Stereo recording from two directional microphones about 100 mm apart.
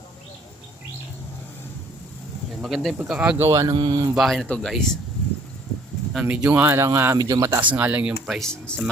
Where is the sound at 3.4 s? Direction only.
30° right (ahead or behind).